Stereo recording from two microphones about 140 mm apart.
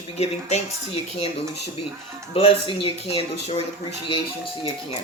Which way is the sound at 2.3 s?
40° left (ahead or behind).